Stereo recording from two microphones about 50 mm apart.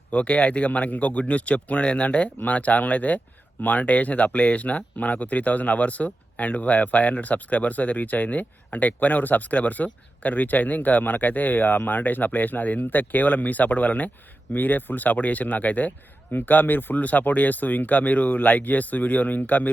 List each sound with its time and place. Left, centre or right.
0.1 s speech: left